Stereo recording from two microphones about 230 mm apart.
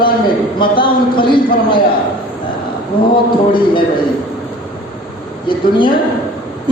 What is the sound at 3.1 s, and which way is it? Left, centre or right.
Speech, left.